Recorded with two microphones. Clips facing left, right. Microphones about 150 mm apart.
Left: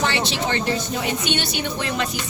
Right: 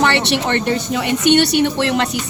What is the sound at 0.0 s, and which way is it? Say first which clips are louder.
Speech: right 6 dB; 65° right (ahead or behind).